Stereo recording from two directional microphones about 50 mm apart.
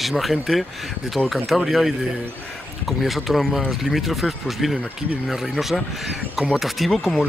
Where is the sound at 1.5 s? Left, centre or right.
Centre.